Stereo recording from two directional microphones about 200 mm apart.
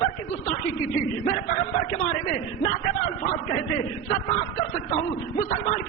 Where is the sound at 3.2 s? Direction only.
30° left (ahead or behind).